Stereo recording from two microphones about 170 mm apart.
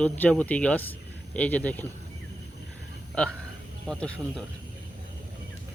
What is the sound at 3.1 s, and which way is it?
A man's voice, 5° left (ahead or behind).